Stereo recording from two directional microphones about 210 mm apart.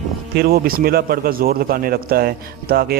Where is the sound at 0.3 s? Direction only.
45° right (ahead or behind).